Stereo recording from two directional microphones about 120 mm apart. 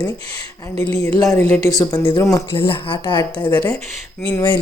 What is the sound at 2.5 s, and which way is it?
Speech, 45° left (ahead or behind).